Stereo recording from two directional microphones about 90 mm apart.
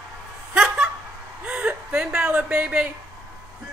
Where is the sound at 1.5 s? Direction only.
15° right (ahead or behind).